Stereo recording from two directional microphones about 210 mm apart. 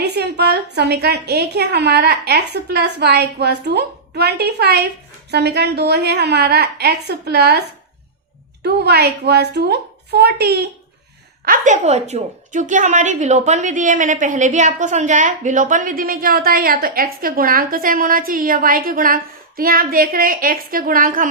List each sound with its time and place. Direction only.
0.0 s a woman's voice: 50° right (ahead or behind)
8.6 s a woman's voice: 50° right (ahead or behind)
11.4 s a woman's voice: 40° right (ahead or behind)